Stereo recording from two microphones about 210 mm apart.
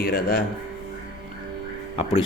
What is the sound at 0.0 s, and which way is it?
Speech, 45° left (ahead or behind).